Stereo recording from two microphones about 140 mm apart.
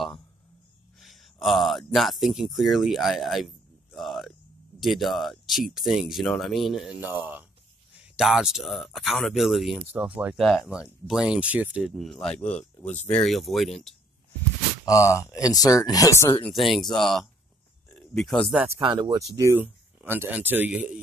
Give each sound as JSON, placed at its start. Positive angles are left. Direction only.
{"t": 0.9, "sound": "speech", "side_deg": 0}
{"t": 7.0, "sound": "speech", "side_deg": -15}
{"t": 10.3, "sound": "speech", "side_deg": 0}
{"t": 14.9, "sound": "speech", "side_deg": 20}
{"t": 16.4, "sound": "speech", "side_deg": 0}
{"t": 18.8, "sound": "speech", "side_deg": -35}